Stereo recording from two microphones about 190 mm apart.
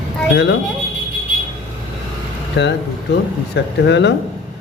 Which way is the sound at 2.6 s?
65° left (ahead or behind).